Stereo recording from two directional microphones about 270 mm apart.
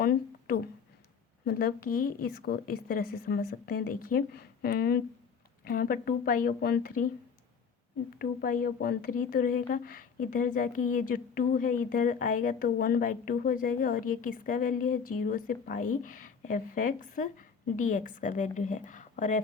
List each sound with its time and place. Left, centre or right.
0.0 s a sound: left
1.5 s a woman's voice: left
8.2 s a woman's voice: left